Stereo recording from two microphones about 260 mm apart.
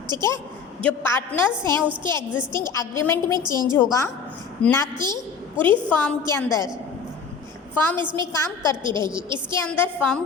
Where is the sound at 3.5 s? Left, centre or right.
Centre.